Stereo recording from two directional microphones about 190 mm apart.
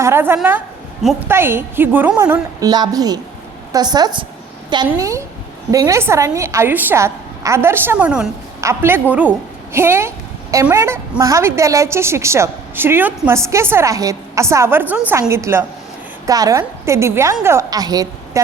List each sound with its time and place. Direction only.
0.0 s a woman's voice: 10° right (ahead or behind)